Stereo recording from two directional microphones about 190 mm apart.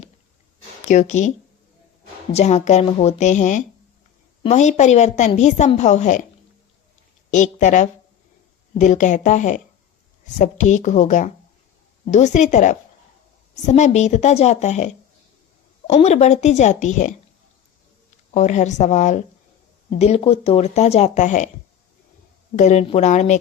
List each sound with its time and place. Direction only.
0.9 s a woman's voice: 40° left (ahead or behind)
2.3 s a woman's voice: 35° left (ahead or behind)
7.3 s a woman's voice: 40° left (ahead or behind)
15.9 s a woman's voice: 35° left (ahead or behind)
18.3 s a woman's voice: 40° left (ahead or behind)
22.5 s a woman's voice: 35° left (ahead or behind)